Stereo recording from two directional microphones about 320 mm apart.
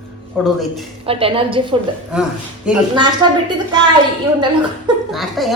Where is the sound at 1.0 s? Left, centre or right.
Centre.